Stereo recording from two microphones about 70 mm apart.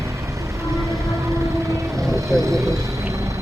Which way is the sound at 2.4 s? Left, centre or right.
Right.